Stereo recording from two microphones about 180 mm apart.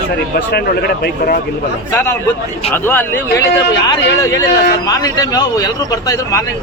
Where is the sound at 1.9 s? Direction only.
10° left (ahead or behind).